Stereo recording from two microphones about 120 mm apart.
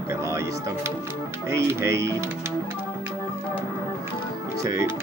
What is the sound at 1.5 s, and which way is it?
Speech, 25° right (ahead or behind).